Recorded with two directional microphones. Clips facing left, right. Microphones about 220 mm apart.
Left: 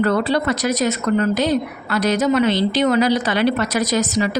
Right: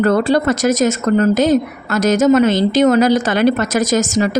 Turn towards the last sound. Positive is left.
turn(degrees=-45)  # may be behind; listen again after turning